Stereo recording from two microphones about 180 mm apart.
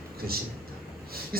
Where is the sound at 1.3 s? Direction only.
55° right (ahead or behind).